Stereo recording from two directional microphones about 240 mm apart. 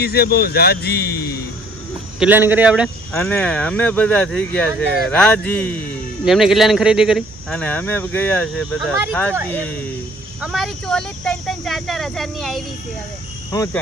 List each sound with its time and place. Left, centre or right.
0.0 s speech: left
2.1 s speech: centre
3.1 s speech: centre
13.5 s speech: centre